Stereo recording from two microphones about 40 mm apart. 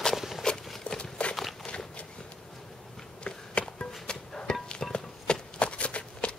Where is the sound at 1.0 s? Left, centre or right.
Left.